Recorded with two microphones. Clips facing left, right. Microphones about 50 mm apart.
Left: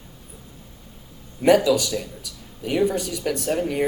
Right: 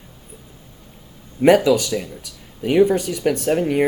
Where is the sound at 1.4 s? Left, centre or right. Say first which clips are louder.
Right 3 dB; right.